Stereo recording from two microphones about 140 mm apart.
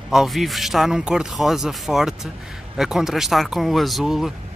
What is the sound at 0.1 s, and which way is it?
A man's voice, centre (ahead or behind).